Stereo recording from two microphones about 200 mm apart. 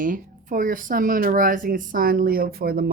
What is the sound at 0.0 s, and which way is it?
Speech, 40° right (ahead or behind).